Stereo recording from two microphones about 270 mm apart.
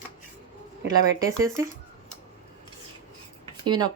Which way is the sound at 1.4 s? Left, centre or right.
Centre.